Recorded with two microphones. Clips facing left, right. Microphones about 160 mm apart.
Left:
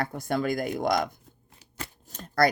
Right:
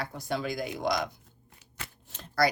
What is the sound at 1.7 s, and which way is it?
Shuffling cards, 45° left (ahead or behind).